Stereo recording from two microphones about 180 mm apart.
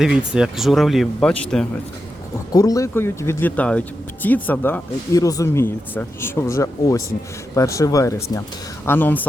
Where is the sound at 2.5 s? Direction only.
20° left (ahead or behind).